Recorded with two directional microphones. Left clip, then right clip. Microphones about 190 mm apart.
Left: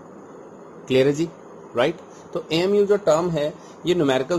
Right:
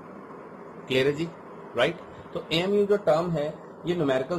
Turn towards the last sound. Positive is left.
turn(degrees=55)  # may be behind; listen again after turning